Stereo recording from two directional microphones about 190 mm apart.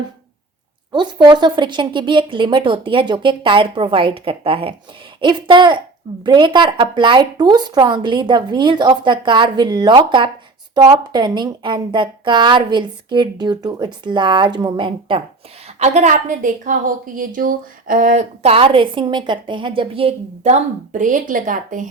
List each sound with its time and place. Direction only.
0.9 s a woman's voice: 25° right (ahead or behind); by 21.8 s 45° right (ahead or behind)